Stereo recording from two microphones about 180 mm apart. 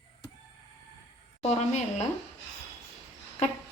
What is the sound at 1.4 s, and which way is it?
Speech, 40° left (ahead or behind).